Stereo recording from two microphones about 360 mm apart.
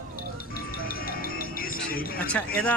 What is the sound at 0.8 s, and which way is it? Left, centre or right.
Music, left.